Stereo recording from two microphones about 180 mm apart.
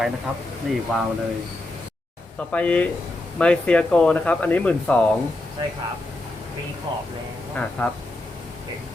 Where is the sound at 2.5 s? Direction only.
5° left (ahead or behind).